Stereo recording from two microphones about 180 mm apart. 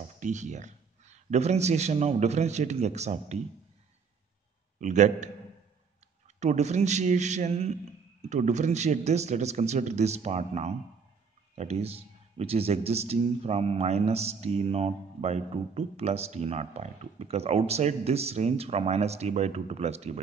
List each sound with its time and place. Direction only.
0.2 s a man's voice: 40° right (ahead or behind)
4.7 s a man's voice: 40° right (ahead or behind)